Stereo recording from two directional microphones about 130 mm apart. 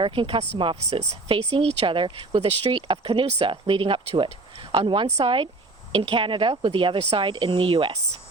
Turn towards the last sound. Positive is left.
turn(degrees=-40)  # may be behind; listen again after turning